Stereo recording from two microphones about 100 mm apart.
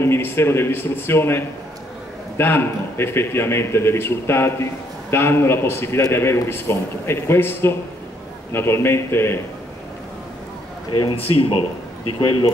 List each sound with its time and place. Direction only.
0.0 s a man's voice: 25° left (ahead or behind)
10.9 s a man's voice: 50° left (ahead or behind)
11.1 s speech: 75° left (ahead or behind)